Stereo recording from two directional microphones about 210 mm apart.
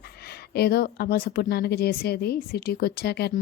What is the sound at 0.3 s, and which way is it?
A woman's voice, 50° left (ahead or behind).